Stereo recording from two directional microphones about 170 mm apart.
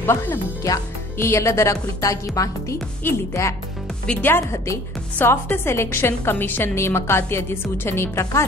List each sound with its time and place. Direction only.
0.0 s speech: 15° left (ahead or behind)